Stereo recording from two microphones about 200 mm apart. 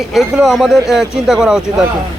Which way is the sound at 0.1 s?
Centre (ahead or behind).